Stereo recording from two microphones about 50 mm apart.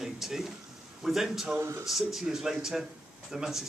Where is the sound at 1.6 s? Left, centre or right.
Right.